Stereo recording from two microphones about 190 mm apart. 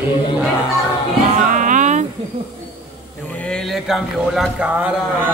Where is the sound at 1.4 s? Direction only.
40° right (ahead or behind).